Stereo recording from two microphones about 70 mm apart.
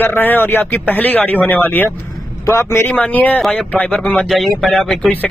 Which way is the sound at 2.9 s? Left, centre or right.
Left.